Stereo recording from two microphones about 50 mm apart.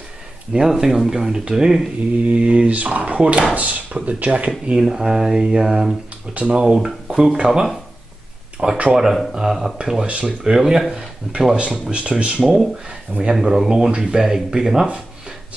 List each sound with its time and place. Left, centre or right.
0.5 s speech: centre
2.2 s speech: right
6.3 s speech: right
6.6 s speech: centre
8.6 s speech: right
8.9 s speech: centre
10.5 s speech: centre